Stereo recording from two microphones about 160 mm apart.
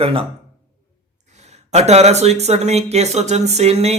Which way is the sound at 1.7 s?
45° right (ahead or behind).